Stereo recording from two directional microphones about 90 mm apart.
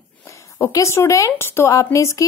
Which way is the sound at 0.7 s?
35° left (ahead or behind).